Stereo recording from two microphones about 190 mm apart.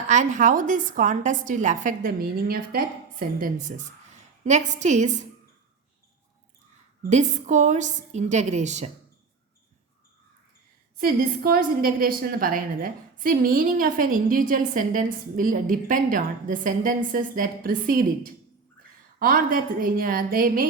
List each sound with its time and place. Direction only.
0.1 s a woman's voice: 40° right (ahead or behind)
7.1 s a woman's voice: 40° right (ahead or behind)
10.9 s a woman's voice: 50° right (ahead or behind)